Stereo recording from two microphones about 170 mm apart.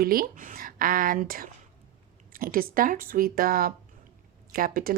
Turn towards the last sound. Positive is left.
turn(degrees=-60)  # may be behind; listen again after turning